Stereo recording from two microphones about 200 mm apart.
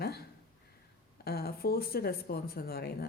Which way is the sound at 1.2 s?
50° left (ahead or behind).